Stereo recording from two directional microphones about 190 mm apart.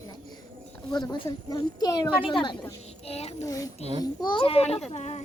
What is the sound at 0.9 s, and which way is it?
A woman's voice, 20° left (ahead or behind).